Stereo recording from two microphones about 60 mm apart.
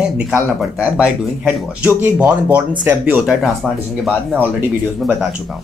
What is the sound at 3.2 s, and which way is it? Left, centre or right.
Speech, centre.